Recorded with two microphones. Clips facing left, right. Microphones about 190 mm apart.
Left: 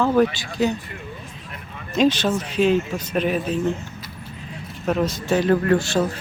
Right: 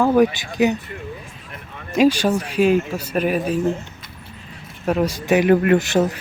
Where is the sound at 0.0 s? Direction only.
15° right (ahead or behind).